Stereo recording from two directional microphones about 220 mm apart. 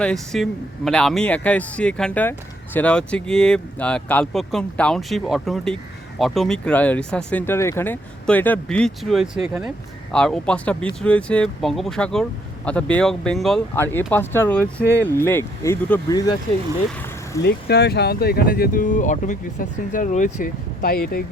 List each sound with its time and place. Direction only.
0.0 s speech: 5° left (ahead or behind)
17.4 s speech: 50° left (ahead or behind)